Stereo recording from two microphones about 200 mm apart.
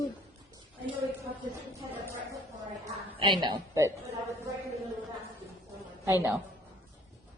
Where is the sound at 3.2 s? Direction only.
20° right (ahead or behind).